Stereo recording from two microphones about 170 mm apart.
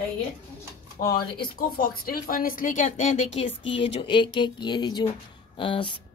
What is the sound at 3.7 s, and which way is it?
Speech, 30° left (ahead or behind).